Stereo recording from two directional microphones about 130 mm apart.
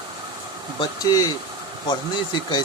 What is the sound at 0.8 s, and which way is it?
Speech, 30° left (ahead or behind).